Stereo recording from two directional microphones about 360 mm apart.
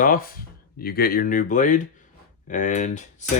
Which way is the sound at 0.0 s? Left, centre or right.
Left.